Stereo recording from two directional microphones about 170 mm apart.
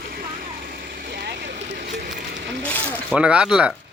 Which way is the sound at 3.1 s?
5° right (ahead or behind).